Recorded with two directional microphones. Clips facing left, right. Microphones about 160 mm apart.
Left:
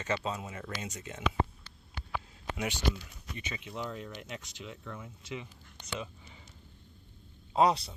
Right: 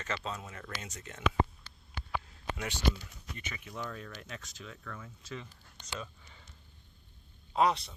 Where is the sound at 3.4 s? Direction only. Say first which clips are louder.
Left 3 dB; 20° left (ahead or behind).